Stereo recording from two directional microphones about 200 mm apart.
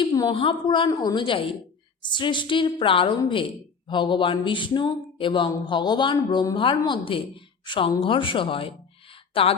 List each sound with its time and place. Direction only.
0.0 s speech: 20° left (ahead or behind)